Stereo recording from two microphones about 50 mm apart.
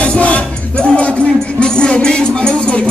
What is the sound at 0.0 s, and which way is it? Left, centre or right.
Music, left.